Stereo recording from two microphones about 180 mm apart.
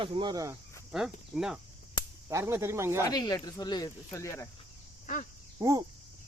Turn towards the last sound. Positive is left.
turn(degrees=-20)  # may be behind; listen again after turning